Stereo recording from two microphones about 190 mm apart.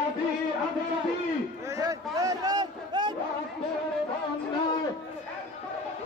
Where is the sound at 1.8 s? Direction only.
20° right (ahead or behind).